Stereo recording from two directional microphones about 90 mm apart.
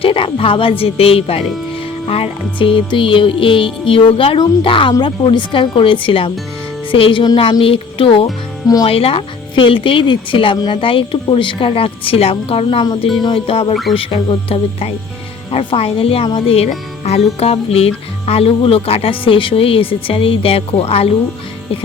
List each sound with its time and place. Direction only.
0.0 s speech: 85° left
2.0 s music: 85° left
7.6 s speech: 90° left
8.6 s speech: 45° left (ahead or behind)
8.9 s music: 90° left; by 10.6 s 75° left (ahead or behind)
10.7 s a woman's voice: 75° left (ahead or behind)
13.9 s speech: 80° left